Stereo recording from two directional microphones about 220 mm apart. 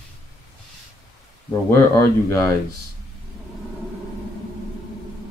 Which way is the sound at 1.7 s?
10° left (ahead or behind).